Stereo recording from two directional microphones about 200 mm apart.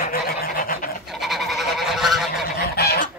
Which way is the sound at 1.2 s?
Centre (ahead or behind).